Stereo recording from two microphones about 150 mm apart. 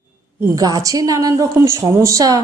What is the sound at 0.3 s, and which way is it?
A woman's voice, 20° right (ahead or behind).